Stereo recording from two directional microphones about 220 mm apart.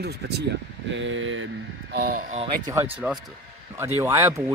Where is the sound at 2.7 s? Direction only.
10° right (ahead or behind).